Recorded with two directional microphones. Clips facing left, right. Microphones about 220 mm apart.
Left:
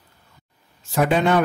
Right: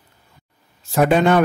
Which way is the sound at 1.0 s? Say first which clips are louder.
Right 3 dB; 50° right (ahead or behind).